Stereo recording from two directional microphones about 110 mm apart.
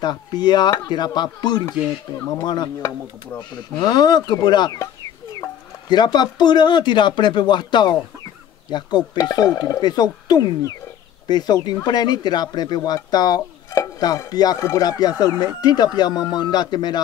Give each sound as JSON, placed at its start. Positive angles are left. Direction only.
{"t": 0.0, "sound": "speech", "side_deg": 40}
{"t": 3.8, "sound": "speech", "side_deg": 40}